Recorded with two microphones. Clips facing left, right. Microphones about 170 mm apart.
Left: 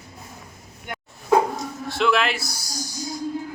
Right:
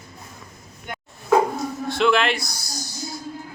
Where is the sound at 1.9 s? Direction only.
Centre (ahead or behind).